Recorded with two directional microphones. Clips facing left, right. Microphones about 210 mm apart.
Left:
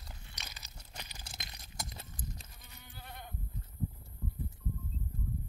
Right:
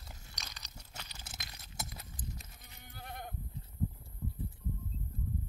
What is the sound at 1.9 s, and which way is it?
Sheep, 30° left (ahead or behind).